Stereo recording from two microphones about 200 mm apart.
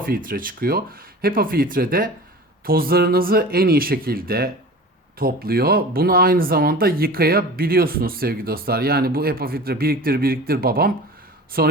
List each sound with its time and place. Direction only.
0.0 s speech: 45° right (ahead or behind)